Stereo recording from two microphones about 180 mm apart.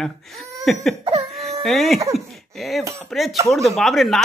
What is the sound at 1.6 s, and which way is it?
Speech, centre (ahead or behind).